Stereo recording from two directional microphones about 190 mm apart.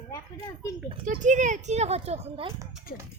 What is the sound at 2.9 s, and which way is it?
Speech, 50° left (ahead or behind).